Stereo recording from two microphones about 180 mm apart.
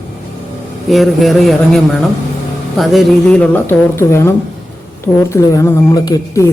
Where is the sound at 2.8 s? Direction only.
Centre (ahead or behind).